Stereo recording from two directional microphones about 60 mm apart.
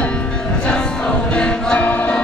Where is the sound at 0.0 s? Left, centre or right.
Centre.